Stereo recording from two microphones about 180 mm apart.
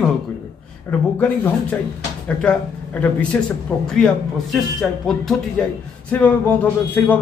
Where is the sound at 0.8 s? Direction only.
10° left (ahead or behind).